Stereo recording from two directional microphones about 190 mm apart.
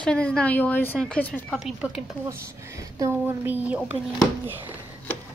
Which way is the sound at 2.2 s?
15° right (ahead or behind).